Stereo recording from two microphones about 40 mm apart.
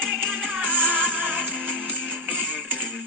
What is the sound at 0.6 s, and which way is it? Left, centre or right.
Music, right.